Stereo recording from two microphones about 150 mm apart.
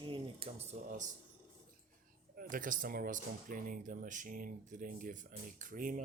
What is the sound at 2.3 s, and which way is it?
Speech, 65° right (ahead or behind).